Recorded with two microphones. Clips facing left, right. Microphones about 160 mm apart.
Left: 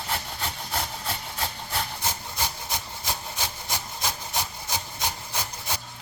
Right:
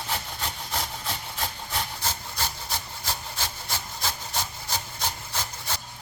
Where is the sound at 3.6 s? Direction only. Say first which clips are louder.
Left 1 dB; 15° left (ahead or behind).